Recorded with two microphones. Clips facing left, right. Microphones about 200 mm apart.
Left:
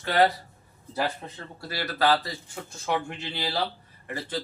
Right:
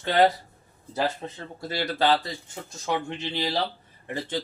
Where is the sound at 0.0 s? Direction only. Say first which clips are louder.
Right 2 dB; 20° right (ahead or behind).